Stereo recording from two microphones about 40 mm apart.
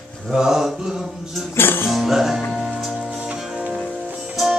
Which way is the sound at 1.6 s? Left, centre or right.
Left.